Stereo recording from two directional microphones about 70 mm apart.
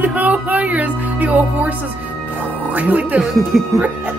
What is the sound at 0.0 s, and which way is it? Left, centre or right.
Music, right.